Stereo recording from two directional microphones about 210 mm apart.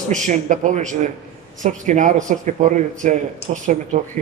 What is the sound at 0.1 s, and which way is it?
Speech, 35° right (ahead or behind).